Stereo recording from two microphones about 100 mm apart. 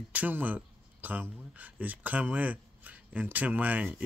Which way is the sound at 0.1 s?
15° right (ahead or behind).